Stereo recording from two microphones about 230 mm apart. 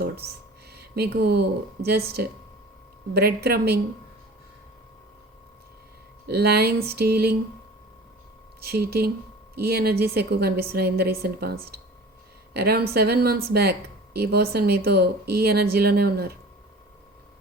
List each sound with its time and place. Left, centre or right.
0.7 s speech: right
6.2 s speech: right
8.6 s speech: right